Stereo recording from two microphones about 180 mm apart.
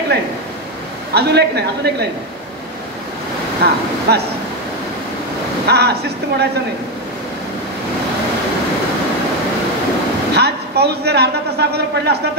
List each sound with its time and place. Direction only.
1.1 s a man's voice: 65° right (ahead or behind)
3.6 s a man's voice: 60° right (ahead or behind)
5.7 s a man's voice: 65° right (ahead or behind)
10.3 s a man's voice: 65° right (ahead or behind)